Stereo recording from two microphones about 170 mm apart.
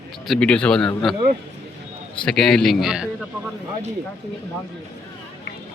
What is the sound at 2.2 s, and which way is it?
Speech, 5° left (ahead or behind).